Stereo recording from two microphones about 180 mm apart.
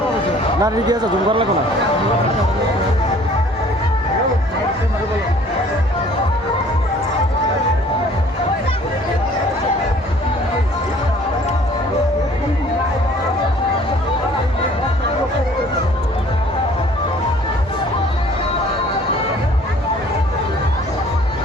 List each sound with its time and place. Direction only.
0.6 s speech: 20° right (ahead or behind)